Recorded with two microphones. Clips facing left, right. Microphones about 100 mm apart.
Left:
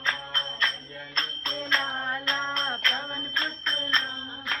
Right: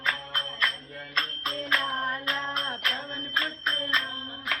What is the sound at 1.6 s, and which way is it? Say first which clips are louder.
Music: even; 20° left (ahead or behind).